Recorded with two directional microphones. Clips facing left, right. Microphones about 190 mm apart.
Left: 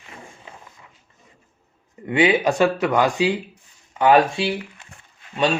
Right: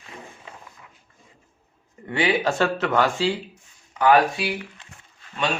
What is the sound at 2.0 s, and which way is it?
Speech, 20° left (ahead or behind).